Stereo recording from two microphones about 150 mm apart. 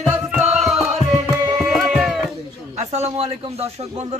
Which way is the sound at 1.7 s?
Centre (ahead or behind).